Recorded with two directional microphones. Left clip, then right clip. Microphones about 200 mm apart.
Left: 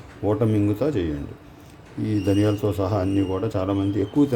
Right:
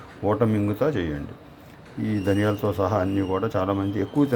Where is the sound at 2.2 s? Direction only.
10° left (ahead or behind).